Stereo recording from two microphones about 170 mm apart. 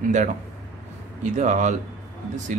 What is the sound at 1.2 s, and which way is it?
Speech, 45° right (ahead or behind).